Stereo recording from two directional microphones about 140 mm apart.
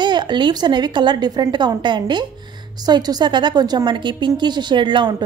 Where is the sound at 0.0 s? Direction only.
35° right (ahead or behind).